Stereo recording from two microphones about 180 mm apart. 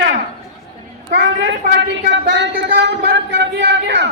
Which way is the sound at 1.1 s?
75° right (ahead or behind).